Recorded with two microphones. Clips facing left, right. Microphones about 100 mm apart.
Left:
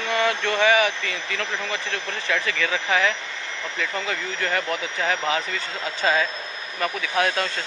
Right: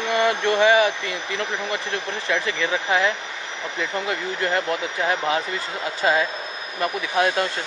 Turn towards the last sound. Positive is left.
turn(degrees=-15)  # may be behind; listen again after turning